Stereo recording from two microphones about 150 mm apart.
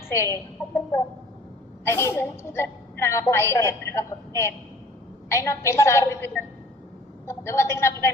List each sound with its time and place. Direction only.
0.1 s a woman's voice: 20° left (ahead or behind)
5.3 s a woman's voice: 20° left (ahead or behind)
7.3 s a woman's voice: 15° left (ahead or behind)